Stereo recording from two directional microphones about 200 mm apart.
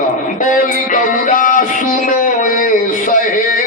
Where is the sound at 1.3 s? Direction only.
40° left (ahead or behind).